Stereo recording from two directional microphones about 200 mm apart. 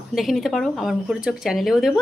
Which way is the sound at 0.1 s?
Centre (ahead or behind).